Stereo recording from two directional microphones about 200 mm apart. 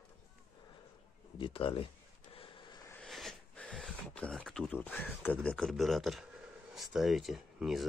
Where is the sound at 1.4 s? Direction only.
25° left (ahead or behind).